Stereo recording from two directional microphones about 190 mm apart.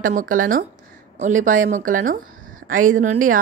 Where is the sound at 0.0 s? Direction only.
45° right (ahead or behind).